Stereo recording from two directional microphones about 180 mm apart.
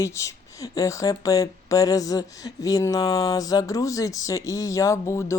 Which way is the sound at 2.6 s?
20° left (ahead or behind).